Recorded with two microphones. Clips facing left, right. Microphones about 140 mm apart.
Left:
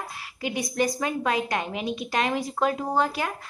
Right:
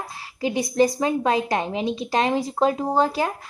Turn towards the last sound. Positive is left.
turn(degrees=-30)  # may be behind; listen again after turning